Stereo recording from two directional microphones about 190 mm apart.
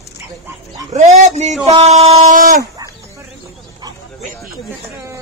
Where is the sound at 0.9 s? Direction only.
35° right (ahead or behind).